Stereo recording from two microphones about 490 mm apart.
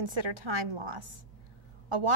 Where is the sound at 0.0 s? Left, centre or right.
Right.